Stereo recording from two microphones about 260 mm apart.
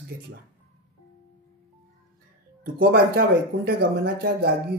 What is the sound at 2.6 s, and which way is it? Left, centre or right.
Speech, right.